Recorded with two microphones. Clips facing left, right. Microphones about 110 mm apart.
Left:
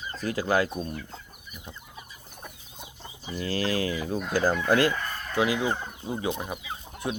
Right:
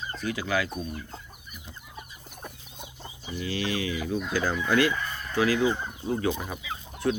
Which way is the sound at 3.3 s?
45° left (ahead or behind).